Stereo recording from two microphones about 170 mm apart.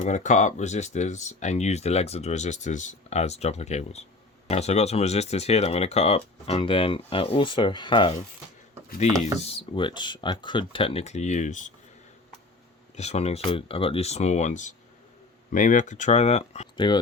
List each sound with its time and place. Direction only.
0.0 s speech: 45° left (ahead or behind)
9.2 s speech: 35° left (ahead or behind)
13.0 s speech: 40° left (ahead or behind)
16.7 s speech: 25° left (ahead or behind)